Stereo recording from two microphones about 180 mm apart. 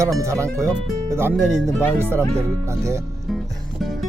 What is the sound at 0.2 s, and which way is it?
Speech, 15° right (ahead or behind).